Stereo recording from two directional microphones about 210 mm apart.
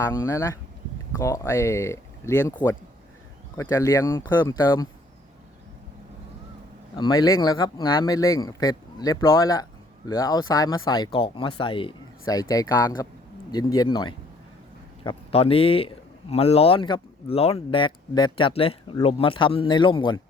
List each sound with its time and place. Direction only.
0.0 s speech: 15° left (ahead or behind)
3.6 s speech: 15° left (ahead or behind)
6.9 s speech: 20° left (ahead or behind)